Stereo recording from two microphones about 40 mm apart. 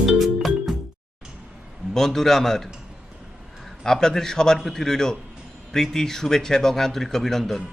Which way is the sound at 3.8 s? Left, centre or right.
Centre.